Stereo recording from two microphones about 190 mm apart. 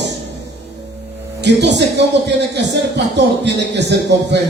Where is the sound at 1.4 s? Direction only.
65° right (ahead or behind).